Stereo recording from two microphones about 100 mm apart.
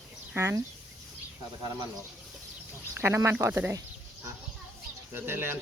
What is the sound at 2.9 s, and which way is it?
Speech, 25° right (ahead or behind).